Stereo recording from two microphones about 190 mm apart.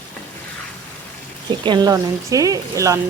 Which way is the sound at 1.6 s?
25° right (ahead or behind).